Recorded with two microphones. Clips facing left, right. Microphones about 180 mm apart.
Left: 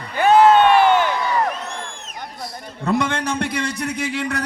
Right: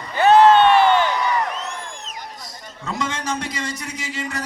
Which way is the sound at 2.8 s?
60° left (ahead or behind).